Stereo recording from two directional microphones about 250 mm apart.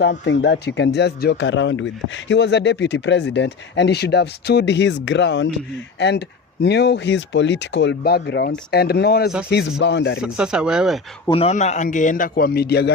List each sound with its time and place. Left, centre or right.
0.0 s a man's voice: left
10.2 s speech: centre
11.3 s a man's voice: left